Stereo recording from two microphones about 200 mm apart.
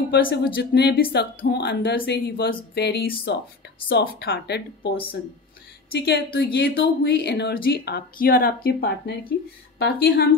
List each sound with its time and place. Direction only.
0.1 s speech: 55° left (ahead or behind)
8.6 s speech: 55° left (ahead or behind)